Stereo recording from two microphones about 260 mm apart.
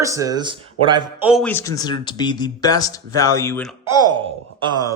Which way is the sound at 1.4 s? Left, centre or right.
Centre.